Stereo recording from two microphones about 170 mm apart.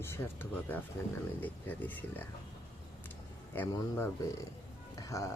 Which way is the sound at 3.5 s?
15° left (ahead or behind).